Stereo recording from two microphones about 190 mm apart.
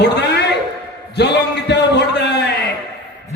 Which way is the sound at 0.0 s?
60° left (ahead or behind).